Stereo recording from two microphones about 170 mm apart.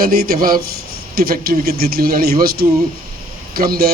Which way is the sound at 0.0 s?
60° right (ahead or behind).